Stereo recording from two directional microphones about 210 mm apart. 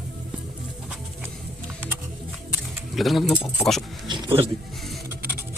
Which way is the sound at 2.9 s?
Centre (ahead or behind).